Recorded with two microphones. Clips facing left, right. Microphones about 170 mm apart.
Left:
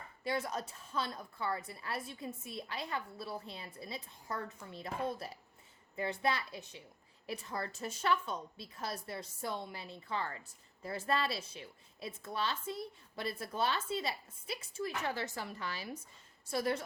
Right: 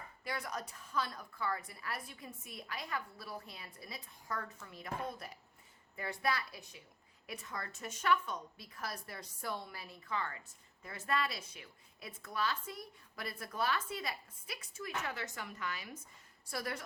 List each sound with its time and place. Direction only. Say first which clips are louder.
0.3 s a woman's voice: left 5 dB; 25° left (ahead or behind)